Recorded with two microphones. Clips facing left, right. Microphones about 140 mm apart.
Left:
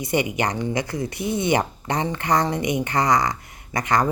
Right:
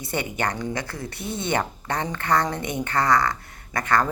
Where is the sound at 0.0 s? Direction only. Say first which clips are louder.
Left 4 dB; 15° left (ahead or behind).